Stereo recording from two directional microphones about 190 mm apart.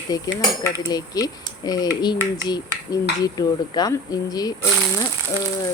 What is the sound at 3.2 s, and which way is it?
Speech, 20° left (ahead or behind).